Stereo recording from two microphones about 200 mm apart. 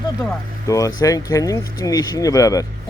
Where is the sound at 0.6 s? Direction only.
15° left (ahead or behind).